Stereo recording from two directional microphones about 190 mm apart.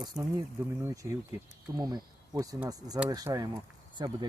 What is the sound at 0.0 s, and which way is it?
Speech, 20° right (ahead or behind).